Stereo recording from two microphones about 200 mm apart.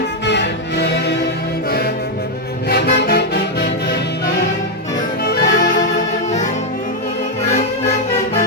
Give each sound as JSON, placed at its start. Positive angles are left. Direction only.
{"t": 0.3, "sound": "music", "side_deg": 60}
{"t": 2.6, "sound": "music", "side_deg": 55}
{"t": 5.2, "sound": "music", "side_deg": 45}